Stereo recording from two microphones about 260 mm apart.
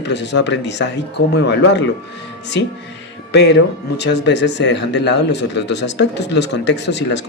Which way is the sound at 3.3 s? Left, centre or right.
Left.